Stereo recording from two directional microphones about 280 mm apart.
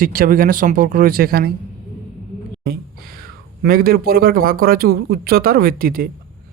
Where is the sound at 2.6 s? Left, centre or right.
Right.